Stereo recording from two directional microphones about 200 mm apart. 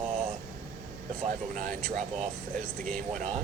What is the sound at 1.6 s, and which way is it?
Speech, 40° right (ahead or behind).